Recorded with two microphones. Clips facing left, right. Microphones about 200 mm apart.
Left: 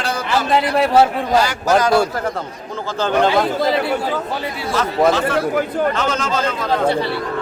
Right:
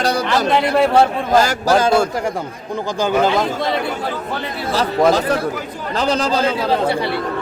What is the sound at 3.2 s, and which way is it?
Speech, centre (ahead or behind).